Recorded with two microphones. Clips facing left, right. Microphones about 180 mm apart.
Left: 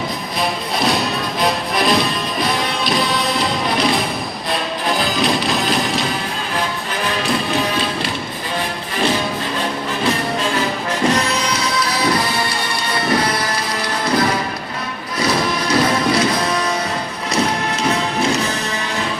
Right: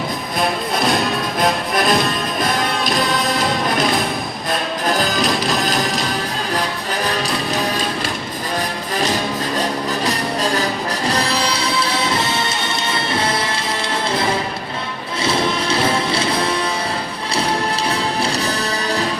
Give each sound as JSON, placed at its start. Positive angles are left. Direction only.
{"t": 0.8, "sound": "music", "side_deg": 0}
{"t": 5.1, "sound": "music", "side_deg": 0}
{"t": 10.1, "sound": "music", "side_deg": -40}
{"t": 15.2, "sound": "music", "side_deg": -25}
{"t": 17.9, "sound": "music", "side_deg": -35}